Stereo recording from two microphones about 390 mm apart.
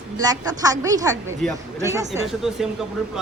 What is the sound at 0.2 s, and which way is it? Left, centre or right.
A woman's voice, centre.